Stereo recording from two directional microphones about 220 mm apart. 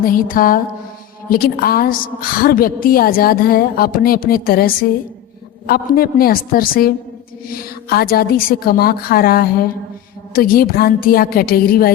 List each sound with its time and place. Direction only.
0.0 s a woman's voice: 40° left (ahead or behind)